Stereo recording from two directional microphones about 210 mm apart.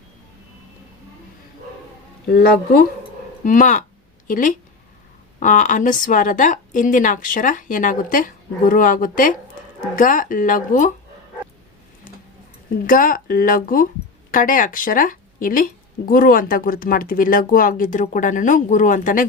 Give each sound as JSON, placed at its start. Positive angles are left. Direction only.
{"t": 2.2, "sound": "speech", "side_deg": 45}
{"t": 12.9, "sound": "speech", "side_deg": 40}